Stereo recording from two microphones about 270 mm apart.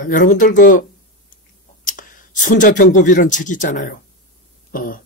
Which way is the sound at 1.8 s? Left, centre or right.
Left.